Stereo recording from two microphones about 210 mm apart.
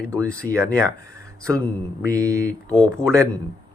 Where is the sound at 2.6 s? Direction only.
5° left (ahead or behind).